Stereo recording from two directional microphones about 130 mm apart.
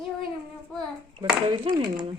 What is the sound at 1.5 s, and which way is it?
Speech, 35° right (ahead or behind).